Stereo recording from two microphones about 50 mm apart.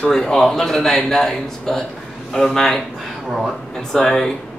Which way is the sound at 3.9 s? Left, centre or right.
Centre.